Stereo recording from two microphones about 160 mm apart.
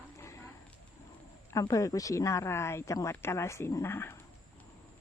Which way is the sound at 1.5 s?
20° left (ahead or behind).